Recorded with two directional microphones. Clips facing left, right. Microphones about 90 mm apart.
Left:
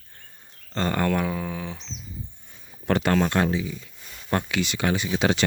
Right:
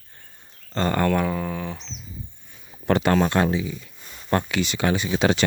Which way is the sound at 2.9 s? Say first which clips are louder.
Right 2 dB; 25° right (ahead or behind).